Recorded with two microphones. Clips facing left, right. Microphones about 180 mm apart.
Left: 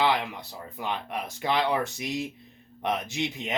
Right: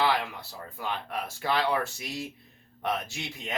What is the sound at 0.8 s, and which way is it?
Speech, 20° left (ahead or behind).